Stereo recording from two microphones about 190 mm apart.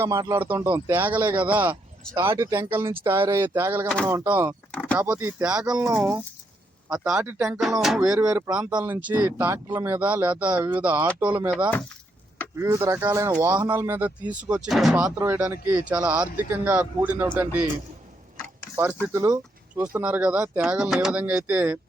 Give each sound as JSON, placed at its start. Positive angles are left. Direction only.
{"t": 0.0, "sound": "speech", "side_deg": -15}
{"t": 4.7, "sound": "a sound", "side_deg": 5}
{"t": 4.9, "sound": "speech", "side_deg": -5}
{"t": 19.0, "sound": "speech", "side_deg": -15}